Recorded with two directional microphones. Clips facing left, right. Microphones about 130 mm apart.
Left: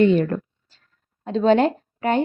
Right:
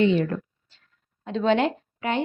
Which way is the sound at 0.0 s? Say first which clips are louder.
Left 4 dB; 50° left (ahead or behind).